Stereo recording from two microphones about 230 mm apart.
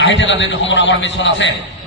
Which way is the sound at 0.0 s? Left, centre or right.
Left.